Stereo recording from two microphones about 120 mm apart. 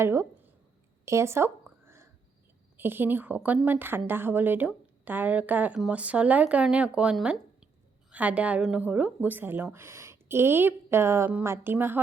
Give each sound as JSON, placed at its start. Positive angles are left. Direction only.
{"t": 0.0, "sound": "speech", "side_deg": -20}
{"t": 1.0, "sound": "a sound", "side_deg": -25}
{"t": 2.7, "sound": "a woman's voice", "side_deg": -15}